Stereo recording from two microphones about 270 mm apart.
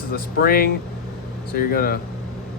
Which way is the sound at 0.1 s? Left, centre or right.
Left.